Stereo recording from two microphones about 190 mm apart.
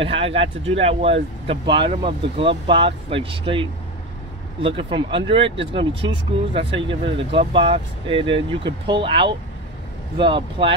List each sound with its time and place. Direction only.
0.0 s speech: 30° right (ahead or behind)
4.6 s speech: 25° right (ahead or behind)